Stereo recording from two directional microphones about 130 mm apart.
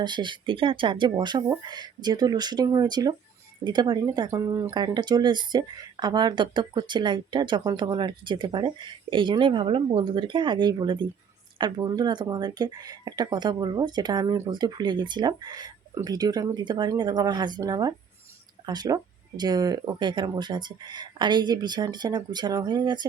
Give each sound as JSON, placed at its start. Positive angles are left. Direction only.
{"t": 0.0, "sound": "speech", "side_deg": -35}
{"t": 4.7, "sound": "speech", "side_deg": -35}